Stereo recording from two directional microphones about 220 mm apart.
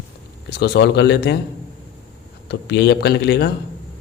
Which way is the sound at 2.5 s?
50° left (ahead or behind).